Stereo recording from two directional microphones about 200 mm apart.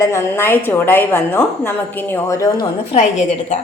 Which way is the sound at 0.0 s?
15° left (ahead or behind).